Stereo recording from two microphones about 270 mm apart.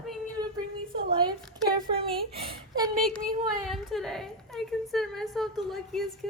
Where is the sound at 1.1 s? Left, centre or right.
Centre.